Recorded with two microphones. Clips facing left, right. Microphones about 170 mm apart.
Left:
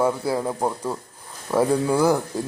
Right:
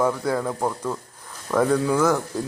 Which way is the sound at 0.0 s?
10° left (ahead or behind).